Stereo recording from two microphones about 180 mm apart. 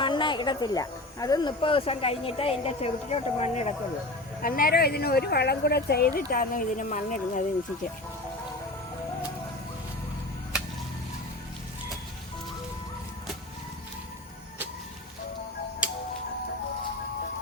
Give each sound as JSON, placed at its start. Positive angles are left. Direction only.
{"t": 0.0, "sound": "speech", "side_deg": 25}
{"t": 4.4, "sound": "a woman's voice", "side_deg": 50}